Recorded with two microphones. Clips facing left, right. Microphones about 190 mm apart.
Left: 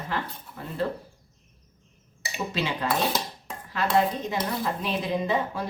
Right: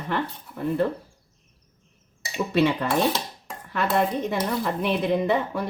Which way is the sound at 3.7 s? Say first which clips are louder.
Right 1 dB; 60° right (ahead or behind).